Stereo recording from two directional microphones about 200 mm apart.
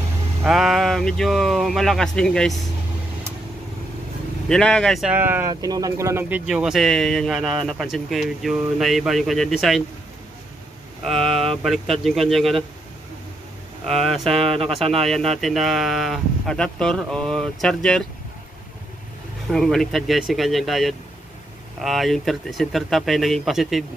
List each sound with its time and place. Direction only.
0.5 s speech: centre (ahead or behind)
4.5 s speech: 5° left (ahead or behind)
11.1 s speech: centre (ahead or behind)
13.8 s speech: centre (ahead or behind)
14.4 s speech: 30° right (ahead or behind)
15.0 s speech: centre (ahead or behind)
19.5 s speech: centre (ahead or behind)